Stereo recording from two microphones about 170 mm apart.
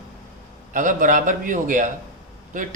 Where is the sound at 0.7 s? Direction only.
50° right (ahead or behind).